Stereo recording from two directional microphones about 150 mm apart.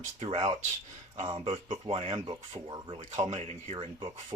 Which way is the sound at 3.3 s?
50° right (ahead or behind).